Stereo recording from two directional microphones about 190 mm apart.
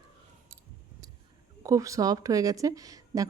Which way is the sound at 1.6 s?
15° right (ahead or behind).